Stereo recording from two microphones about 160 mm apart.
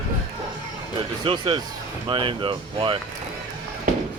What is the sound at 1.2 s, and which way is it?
Speech, 30° right (ahead or behind).